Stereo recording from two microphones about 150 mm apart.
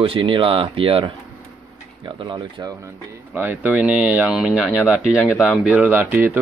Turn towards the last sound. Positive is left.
turn(degrees=-10)  # may be behind; listen again after turning